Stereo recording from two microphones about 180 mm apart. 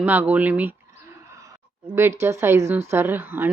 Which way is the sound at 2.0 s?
15° right (ahead or behind).